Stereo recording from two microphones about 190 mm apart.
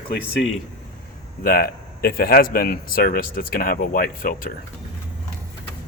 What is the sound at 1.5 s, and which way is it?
Speech, 55° left (ahead or behind).